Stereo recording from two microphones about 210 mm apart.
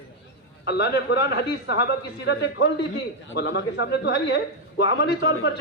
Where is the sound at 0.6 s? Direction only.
50° left (ahead or behind).